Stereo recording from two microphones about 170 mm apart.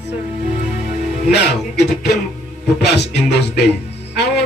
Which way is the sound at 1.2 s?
80° left.